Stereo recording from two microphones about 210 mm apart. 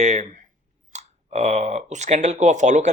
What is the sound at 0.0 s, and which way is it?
Speech, 35° right (ahead or behind).